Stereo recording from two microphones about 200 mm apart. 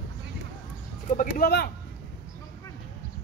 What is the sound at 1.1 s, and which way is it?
Speech, 40° left (ahead or behind).